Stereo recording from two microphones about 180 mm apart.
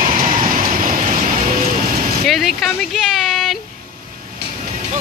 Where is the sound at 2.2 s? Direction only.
Centre (ahead or behind).